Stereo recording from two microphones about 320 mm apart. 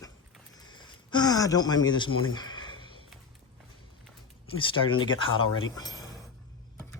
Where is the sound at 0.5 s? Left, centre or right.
Centre.